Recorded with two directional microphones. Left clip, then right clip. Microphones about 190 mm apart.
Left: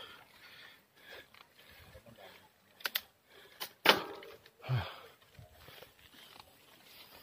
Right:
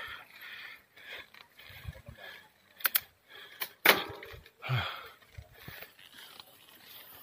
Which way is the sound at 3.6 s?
55° right (ahead or behind).